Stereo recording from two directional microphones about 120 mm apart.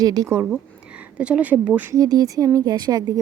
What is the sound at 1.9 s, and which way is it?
Speech, 30° right (ahead or behind).